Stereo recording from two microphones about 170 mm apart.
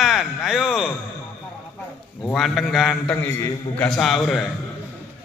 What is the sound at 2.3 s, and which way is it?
A man's voice, centre (ahead or behind).